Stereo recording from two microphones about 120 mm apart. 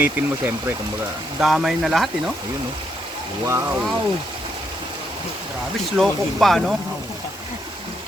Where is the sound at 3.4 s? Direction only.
20° right (ahead or behind).